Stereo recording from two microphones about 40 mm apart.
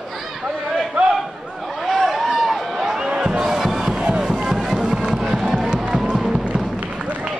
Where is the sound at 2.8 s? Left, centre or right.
Centre.